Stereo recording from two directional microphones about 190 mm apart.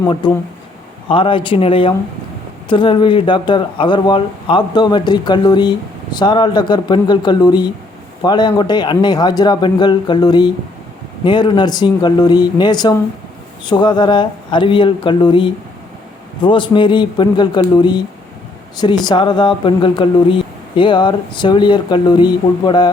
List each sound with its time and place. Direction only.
0.0 s speech: 20° left (ahead or behind)